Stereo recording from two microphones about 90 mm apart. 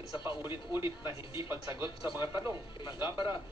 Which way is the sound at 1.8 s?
60° left (ahead or behind).